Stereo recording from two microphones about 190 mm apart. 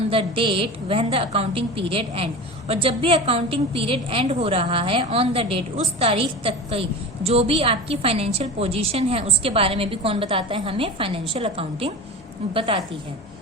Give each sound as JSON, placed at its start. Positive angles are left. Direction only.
{"t": 0.1, "sound": "a woman's voice", "side_deg": -30}